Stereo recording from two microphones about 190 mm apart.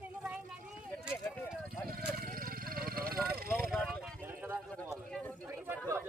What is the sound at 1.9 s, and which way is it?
Vehicle, 50° right (ahead or behind).